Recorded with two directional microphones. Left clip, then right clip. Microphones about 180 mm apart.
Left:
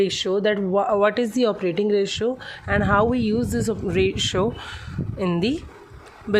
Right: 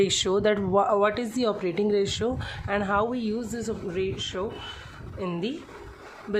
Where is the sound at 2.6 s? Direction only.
30° left (ahead or behind); by 5.6 s 65° left (ahead or behind).